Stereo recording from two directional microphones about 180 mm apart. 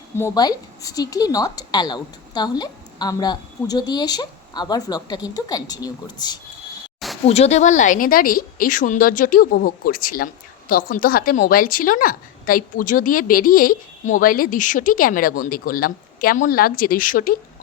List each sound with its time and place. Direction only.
0.2 s a woman's voice: 20° left (ahead or behind)
7.3 s a woman's voice: 35° left (ahead or behind)